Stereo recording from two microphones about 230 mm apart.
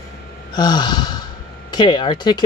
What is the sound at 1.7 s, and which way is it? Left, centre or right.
Speech, centre.